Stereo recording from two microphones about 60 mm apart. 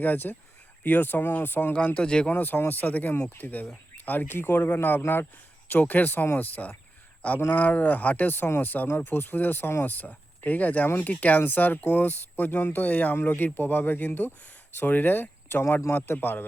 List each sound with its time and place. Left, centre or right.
0.0 s speech: left
2.3 s speech: left